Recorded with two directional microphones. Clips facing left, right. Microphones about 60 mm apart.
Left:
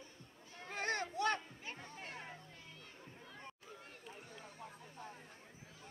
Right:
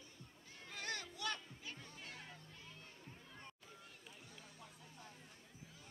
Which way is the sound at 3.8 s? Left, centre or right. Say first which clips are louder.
Left 5 dB; left.